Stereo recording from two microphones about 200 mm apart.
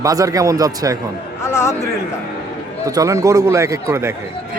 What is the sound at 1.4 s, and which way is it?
Speech, 15° left (ahead or behind).